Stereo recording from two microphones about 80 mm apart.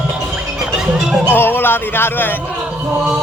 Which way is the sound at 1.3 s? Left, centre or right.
Left.